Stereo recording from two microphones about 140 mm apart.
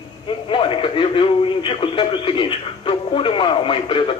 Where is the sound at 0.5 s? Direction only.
40° left (ahead or behind).